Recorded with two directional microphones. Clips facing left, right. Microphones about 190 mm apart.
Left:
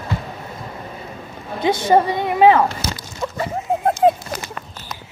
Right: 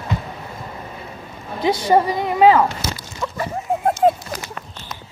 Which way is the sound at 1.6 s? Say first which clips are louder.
Left 1 dB; 25° left (ahead or behind).